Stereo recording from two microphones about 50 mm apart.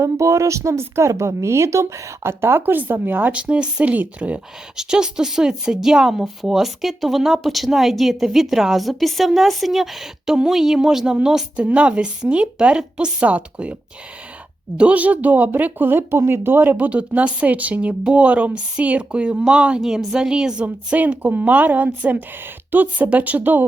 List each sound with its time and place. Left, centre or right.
0.0 s speech: right
3.3 s speech: right
4.8 s speech: centre
11.5 s speech: right
14.8 s speech: right
16.7 s speech: right
19.8 s speech: centre
20.9 s speech: right